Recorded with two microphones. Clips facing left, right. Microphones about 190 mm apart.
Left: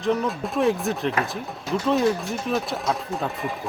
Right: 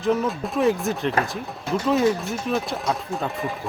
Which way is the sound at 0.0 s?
Centre (ahead or behind).